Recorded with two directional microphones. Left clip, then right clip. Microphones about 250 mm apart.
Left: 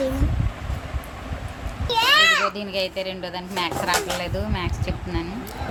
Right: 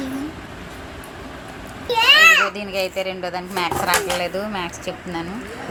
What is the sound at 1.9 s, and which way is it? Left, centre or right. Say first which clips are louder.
Children playing: right 5 dB; centre.